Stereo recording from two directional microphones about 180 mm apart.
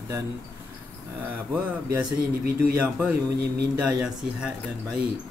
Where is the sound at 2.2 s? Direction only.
60° right (ahead or behind).